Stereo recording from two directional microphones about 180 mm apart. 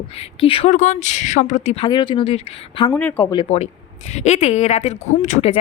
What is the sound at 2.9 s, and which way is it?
Speech, 10° left (ahead or behind).